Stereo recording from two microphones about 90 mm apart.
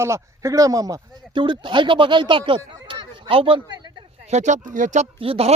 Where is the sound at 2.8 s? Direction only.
75° right (ahead or behind).